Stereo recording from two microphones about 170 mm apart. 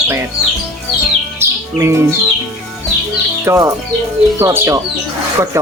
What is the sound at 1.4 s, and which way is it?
Music, 15° right (ahead or behind).